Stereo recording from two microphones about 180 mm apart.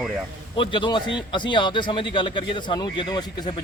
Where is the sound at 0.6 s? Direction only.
25° left (ahead or behind).